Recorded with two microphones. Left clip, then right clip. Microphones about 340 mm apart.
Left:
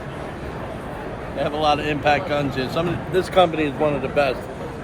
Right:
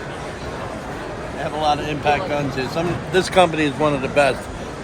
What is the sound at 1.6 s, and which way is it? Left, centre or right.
Speech, centre.